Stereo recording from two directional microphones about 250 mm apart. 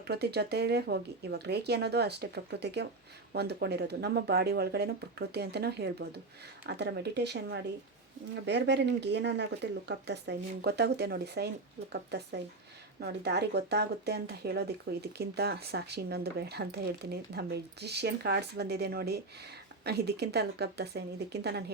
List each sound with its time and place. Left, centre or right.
0.1 s speech: right